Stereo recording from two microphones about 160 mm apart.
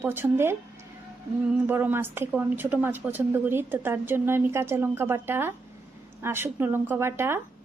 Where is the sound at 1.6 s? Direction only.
10° right (ahead or behind).